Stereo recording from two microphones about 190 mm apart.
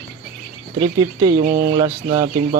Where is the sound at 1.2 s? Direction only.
30° right (ahead or behind).